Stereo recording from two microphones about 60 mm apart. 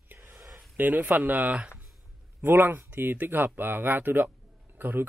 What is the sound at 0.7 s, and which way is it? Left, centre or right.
Speech, right.